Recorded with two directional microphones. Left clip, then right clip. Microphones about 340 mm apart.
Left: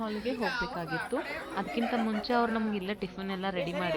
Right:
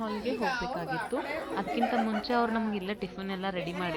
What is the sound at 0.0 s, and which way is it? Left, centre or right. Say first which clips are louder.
Speech: right 1 dB; centre.